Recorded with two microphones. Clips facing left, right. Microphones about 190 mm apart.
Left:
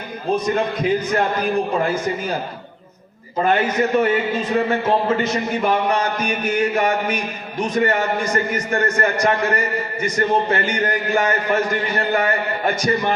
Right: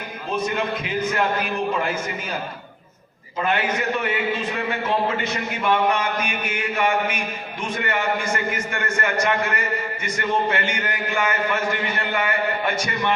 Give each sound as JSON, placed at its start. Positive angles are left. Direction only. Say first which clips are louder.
{"t": 0.3, "sound": "a man's voice", "louder": "left 5 dB", "side_deg": 35}
{"t": 3.3, "sound": "a man's voice", "louder": "left 5 dB", "side_deg": 40}